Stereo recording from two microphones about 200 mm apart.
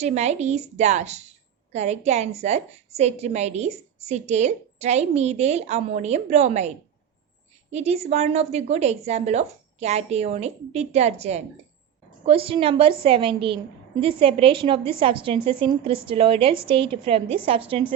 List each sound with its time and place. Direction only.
0.0 s a woman's voice: 35° right (ahead or behind)